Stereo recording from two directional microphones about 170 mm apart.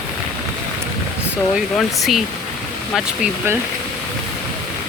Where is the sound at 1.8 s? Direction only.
Centre (ahead or behind).